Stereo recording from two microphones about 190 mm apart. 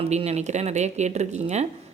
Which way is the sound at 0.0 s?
30° right (ahead or behind).